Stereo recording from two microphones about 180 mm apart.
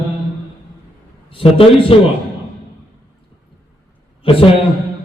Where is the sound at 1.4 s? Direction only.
30° left (ahead or behind).